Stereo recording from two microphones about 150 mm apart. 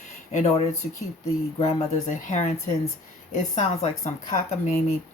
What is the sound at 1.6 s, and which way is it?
A woman's voice, 50° left (ahead or behind).